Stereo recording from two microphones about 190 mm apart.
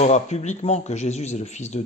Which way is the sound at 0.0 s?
35° left (ahead or behind).